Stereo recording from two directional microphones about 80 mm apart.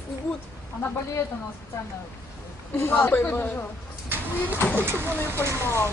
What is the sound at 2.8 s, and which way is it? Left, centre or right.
Speech, left.